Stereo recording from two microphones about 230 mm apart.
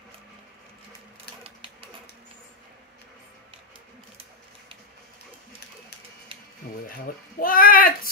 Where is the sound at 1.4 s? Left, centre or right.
Right.